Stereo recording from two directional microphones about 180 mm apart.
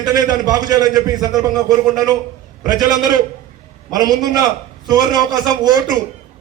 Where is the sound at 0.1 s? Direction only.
20° right (ahead or behind).